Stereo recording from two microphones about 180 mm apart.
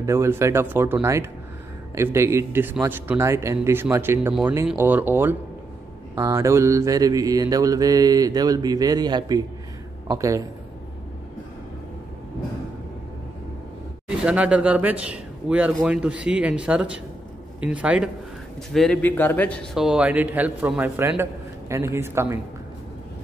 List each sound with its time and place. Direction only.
0.0 s a man's voice: 15° right (ahead or behind)
6.1 s mantra: 15° right (ahead or behind)
10.0 s a man's voice: 20° right (ahead or behind)
14.0 s a man's voice: 5° right (ahead or behind)
18.7 s a man's voice: 5° left (ahead or behind); by 22.4 s 15° right (ahead or behind)